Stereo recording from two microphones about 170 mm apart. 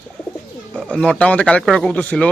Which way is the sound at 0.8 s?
5° left (ahead or behind).